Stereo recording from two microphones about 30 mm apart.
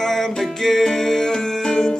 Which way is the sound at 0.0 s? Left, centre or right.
Centre.